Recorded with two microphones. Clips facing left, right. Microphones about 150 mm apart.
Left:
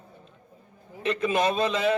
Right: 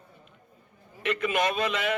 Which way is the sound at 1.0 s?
30° left (ahead or behind).